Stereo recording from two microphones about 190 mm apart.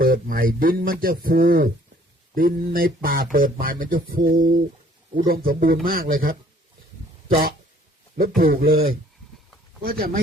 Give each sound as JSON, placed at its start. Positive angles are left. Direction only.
{"t": 0.0, "sound": "speech", "side_deg": -50}
{"t": 8.4, "sound": "speech", "side_deg": -50}